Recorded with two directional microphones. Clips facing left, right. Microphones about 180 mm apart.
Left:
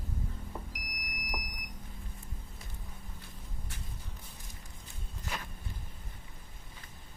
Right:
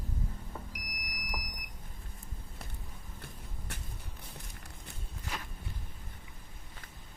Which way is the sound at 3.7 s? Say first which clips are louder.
Right 4 dB; 70° right (ahead or behind).